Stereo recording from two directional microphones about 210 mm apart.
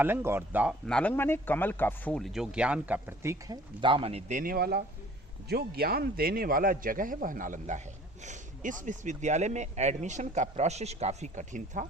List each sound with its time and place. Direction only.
0.0 s speech: 10° right (ahead or behind); by 11.9 s 35° right (ahead or behind)